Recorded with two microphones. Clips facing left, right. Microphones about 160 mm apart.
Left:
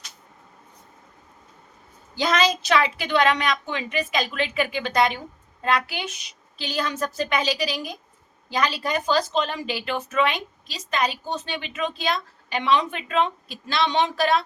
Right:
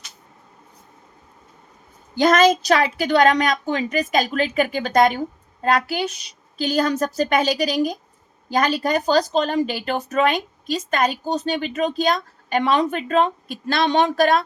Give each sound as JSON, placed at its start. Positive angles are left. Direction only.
{"t": 2.1, "sound": "a woman's voice", "side_deg": -50}